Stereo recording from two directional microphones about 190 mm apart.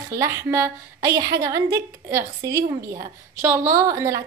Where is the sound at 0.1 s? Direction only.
15° right (ahead or behind).